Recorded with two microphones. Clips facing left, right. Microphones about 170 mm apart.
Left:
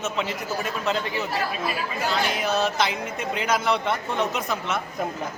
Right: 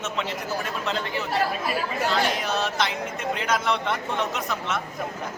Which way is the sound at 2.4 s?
5° left (ahead or behind).